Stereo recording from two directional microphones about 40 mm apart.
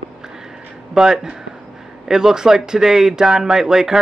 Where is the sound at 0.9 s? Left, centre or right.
Centre.